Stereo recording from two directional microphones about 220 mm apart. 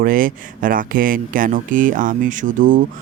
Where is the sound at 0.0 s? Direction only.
40° right (ahead or behind).